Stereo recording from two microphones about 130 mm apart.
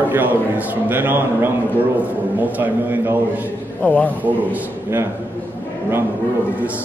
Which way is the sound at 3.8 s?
10° left (ahead or behind).